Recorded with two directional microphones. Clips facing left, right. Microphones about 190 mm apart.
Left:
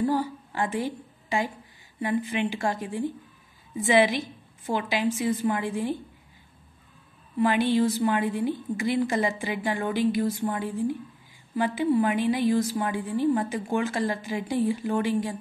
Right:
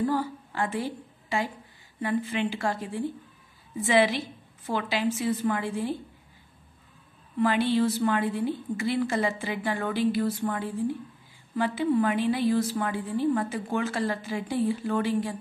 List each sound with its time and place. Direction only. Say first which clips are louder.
0.1 s a woman's voice: left 2 dB; 15° left (ahead or behind)
7.3 s a woman's voice: left 1 dB; 15° left (ahead or behind)